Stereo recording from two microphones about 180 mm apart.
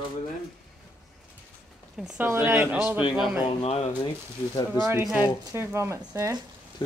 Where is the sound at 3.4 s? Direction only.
30° left (ahead or behind).